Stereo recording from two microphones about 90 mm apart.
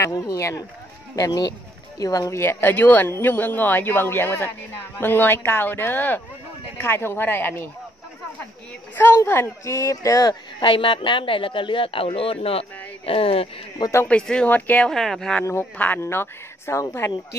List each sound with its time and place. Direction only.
0.3 s a child's voice: 35° left (ahead or behind)
2.4 s speech: 20° left (ahead or behind)
8.9 s a child's voice: 25° left (ahead or behind)
10.6 s a man's voice: 65° left (ahead or behind); by 13.5 s 90° left
14.0 s speech: 10° left (ahead or behind)
14.9 s speech: 5° left (ahead or behind)
16.0 s speech: 30° left (ahead or behind)